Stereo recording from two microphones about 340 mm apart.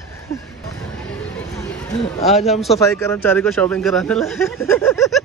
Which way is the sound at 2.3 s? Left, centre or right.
Centre.